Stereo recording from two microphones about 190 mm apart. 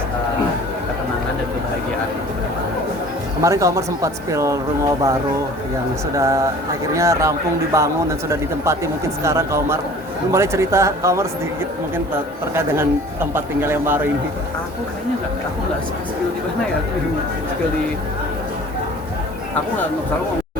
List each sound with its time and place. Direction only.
3.4 s speech: 15° right (ahead or behind)
6.1 s speech: 15° right (ahead or behind)
12.5 s speech: 10° right (ahead or behind)